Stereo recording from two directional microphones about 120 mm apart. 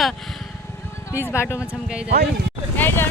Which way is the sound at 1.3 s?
20° left (ahead or behind).